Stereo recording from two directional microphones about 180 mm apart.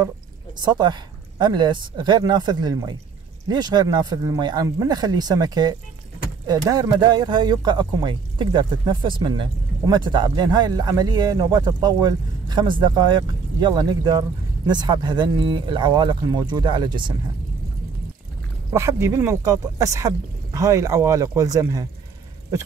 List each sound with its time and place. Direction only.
0.7 s speech: 25° right (ahead or behind)
18.7 s speech: 15° right (ahead or behind)